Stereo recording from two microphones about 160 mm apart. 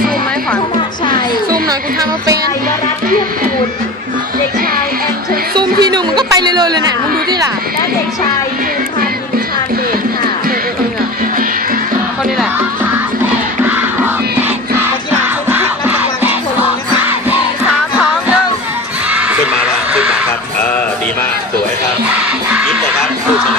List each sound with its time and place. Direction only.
1.6 s speech: 20° right (ahead or behind)
5.5 s chatter: 25° right (ahead or behind)
15.4 s music: 10° right (ahead or behind)
19.9 s a sound: 5° right (ahead or behind)